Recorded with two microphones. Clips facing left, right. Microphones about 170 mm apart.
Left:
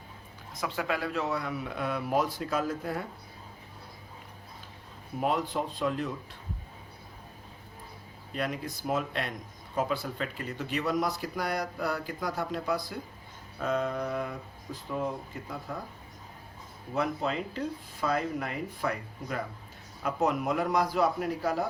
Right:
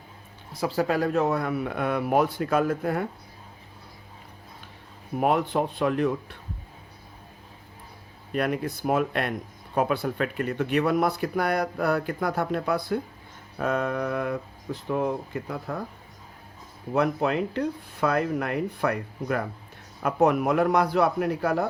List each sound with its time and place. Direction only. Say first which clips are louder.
0.5 s speech: right 7 dB; 35° right (ahead or behind); by 3.1 s 60° right (ahead or behind)
5.2 s speech: right 6 dB; 60° right (ahead or behind)
8.3 s speech: right 7 dB; 60° right (ahead or behind)
16.9 s speech: right 6 dB; 65° right (ahead or behind)